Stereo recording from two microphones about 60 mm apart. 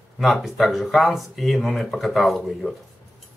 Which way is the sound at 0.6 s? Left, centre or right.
Centre.